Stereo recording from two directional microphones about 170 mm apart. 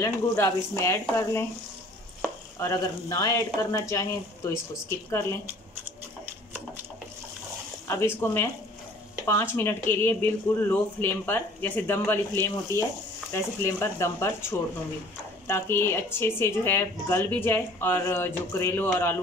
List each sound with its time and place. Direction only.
0.0 s a woman's voice: 15° left (ahead or behind)
2.6 s a woman's voice: 20° left (ahead or behind)
7.9 s a woman's voice: 15° left (ahead or behind)